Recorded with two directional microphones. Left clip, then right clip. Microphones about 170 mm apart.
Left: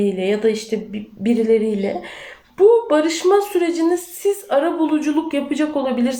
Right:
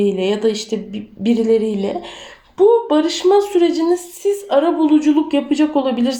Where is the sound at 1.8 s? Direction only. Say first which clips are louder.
Right 1 dB; 50° right (ahead or behind).